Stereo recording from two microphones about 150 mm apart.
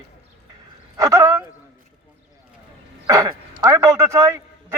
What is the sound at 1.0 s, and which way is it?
Speech, 25° right (ahead or behind).